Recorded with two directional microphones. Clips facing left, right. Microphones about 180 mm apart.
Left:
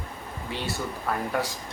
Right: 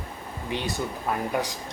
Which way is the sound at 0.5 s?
20° right (ahead or behind).